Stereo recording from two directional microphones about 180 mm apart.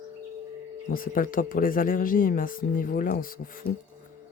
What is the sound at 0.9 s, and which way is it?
Speech, 50° left (ahead or behind).